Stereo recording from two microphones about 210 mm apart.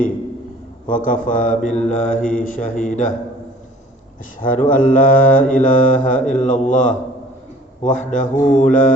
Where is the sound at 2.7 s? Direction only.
40° left (ahead or behind).